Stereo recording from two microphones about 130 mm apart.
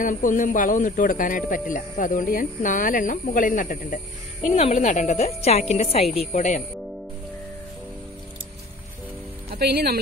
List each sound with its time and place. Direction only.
0.0 s speech: 90° left
4.6 s a woman's voice: 60° left (ahead or behind)